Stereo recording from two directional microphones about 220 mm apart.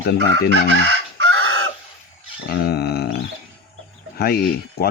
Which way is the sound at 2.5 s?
45° left (ahead or behind).